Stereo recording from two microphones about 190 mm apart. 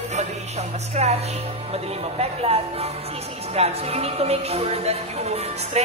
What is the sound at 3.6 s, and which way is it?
Speech, 35° right (ahead or behind).